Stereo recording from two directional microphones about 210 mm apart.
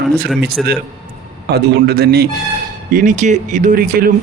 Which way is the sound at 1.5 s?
50° right (ahead or behind).